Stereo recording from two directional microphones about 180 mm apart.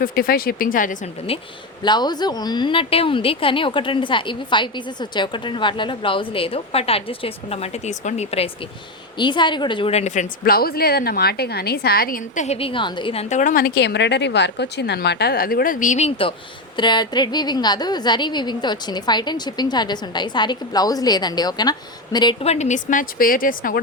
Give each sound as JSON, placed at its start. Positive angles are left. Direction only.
{"t": 0.0, "sound": "speech", "side_deg": 55}
{"t": 1.3, "sound": "a woman's voice", "side_deg": 30}
{"t": 9.1, "sound": "a woman's voice", "side_deg": 25}
{"t": 10.4, "sound": "speech", "side_deg": 55}
{"t": 13.3, "sound": "a woman's voice", "side_deg": 50}